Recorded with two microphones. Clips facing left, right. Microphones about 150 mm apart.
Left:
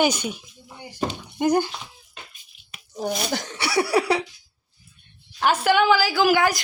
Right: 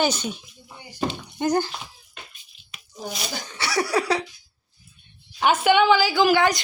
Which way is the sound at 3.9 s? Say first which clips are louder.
Left 2 dB; 30° left (ahead or behind).